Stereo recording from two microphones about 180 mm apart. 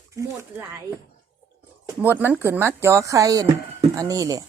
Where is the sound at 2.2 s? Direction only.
10° right (ahead or behind).